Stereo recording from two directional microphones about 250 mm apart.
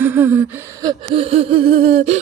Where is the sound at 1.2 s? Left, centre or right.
Right.